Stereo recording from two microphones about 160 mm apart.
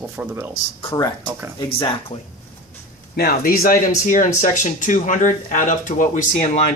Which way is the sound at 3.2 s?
70° left (ahead or behind).